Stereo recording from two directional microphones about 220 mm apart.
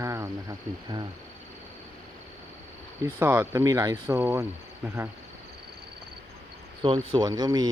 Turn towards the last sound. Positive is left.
turn(degrees=-20)  # may be behind; listen again after turning